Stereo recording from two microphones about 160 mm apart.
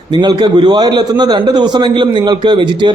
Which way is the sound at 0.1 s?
25° right (ahead or behind).